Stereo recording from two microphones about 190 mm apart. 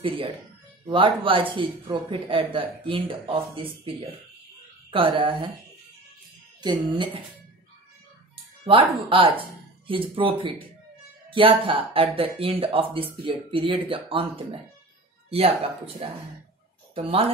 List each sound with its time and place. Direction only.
0.8 s speech: 25° right (ahead or behind)
6.6 s speech: 25° right (ahead or behind)
8.6 s speech: 30° right (ahead or behind)
11.2 s a sound: 25° right (ahead or behind)
11.6 s speech: 30° right (ahead or behind)